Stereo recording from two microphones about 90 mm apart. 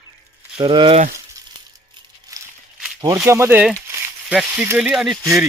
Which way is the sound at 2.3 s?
45° right (ahead or behind).